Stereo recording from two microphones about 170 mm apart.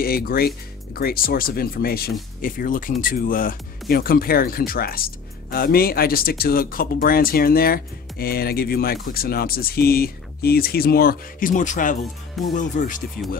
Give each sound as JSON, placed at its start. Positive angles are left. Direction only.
{"t": 0.0, "sound": "speech", "side_deg": 60}
{"t": 2.4, "sound": "speech", "side_deg": 55}